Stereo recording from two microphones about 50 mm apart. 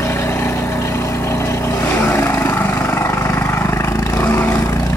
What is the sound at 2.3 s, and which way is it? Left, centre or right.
Vehicle, left.